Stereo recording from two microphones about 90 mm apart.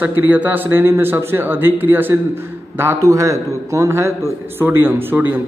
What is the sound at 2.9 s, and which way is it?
A man's voice, 40° right (ahead or behind).